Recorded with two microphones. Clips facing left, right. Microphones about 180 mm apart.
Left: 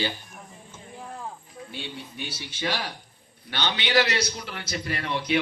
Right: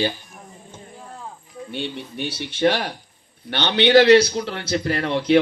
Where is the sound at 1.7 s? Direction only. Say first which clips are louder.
Right 9 dB; 65° right (ahead or behind).